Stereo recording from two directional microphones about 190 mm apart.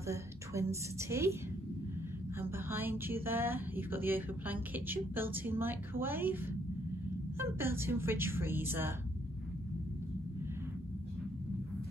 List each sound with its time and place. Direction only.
0.0 s a woman's voice: 15° right (ahead or behind)
2.5 s speech: 10° right (ahead or behind)